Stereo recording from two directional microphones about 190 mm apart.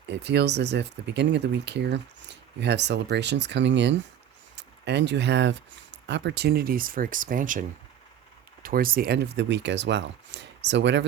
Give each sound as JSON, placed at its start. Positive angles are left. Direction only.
{"t": 0.1, "sound": "speech", "side_deg": -65}
{"t": 8.6, "sound": "speech", "side_deg": -50}